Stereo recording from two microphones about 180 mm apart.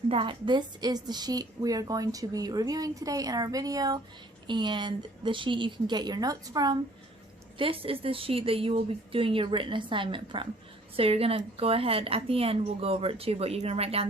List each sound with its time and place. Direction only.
0.1 s a woman's voice: 25° right (ahead or behind)